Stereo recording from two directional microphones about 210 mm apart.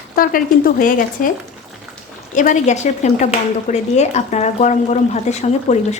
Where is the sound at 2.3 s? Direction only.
35° left (ahead or behind).